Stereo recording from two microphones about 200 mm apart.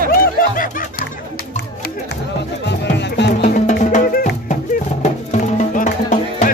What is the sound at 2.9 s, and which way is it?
Music, 60° left (ahead or behind).